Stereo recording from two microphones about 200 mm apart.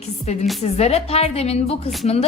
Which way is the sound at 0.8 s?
30° left (ahead or behind).